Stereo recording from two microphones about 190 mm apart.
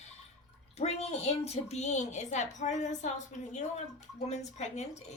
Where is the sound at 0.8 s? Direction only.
35° left (ahead or behind).